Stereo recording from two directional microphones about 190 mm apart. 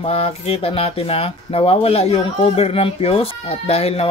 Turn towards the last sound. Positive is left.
turn(degrees=35)  # may be behind; listen again after turning